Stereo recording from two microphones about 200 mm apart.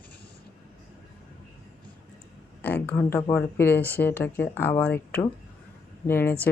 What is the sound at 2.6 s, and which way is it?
Speech, 10° left (ahead or behind).